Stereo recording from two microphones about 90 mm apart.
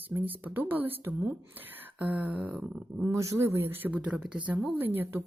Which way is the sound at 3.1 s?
35° right (ahead or behind).